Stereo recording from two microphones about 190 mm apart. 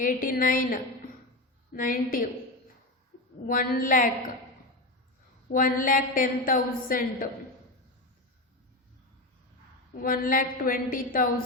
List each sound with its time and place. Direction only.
0.0 s a woman's voice: 45° left (ahead or behind)
3.4 s a woman's voice: 50° left (ahead or behind)
5.5 s a woman's voice: 45° left (ahead or behind)
9.9 s a woman's voice: 45° left (ahead or behind)